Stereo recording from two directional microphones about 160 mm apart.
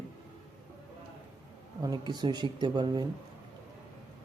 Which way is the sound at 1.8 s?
25° right (ahead or behind).